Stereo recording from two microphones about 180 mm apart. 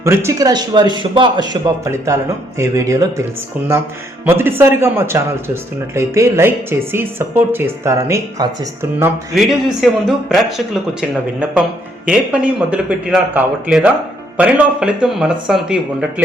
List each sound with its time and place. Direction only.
0.0 s a man's voice: 15° right (ahead or behind)
4.3 s speech: 10° right (ahead or behind)
9.3 s a man's voice: centre (ahead or behind)
12.0 s a man's voice: 5° right (ahead or behind)